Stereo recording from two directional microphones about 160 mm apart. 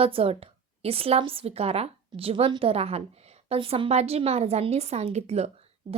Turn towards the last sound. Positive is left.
turn(degrees=-40)  # may be behind; listen again after turning